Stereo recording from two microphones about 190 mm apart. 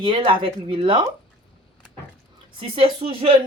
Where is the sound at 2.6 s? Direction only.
30° right (ahead or behind).